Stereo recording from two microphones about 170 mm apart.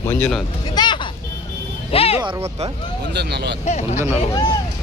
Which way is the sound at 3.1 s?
80° right.